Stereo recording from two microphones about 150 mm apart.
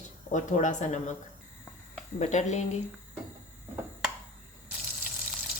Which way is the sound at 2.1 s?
50° left (ahead or behind).